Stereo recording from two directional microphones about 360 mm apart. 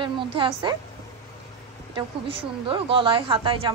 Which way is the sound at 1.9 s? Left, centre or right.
Centre.